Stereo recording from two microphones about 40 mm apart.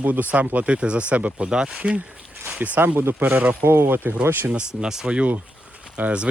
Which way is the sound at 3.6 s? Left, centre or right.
Right.